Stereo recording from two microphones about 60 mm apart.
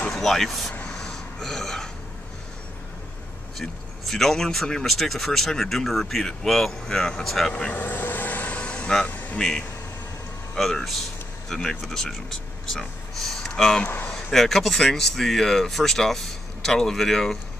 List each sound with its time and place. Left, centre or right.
0.1 s speech: centre
0.9 s burping: centre
4.1 s speech: centre
7.7 s vehicle: left
9.0 s a sound: left
9.4 s speech: centre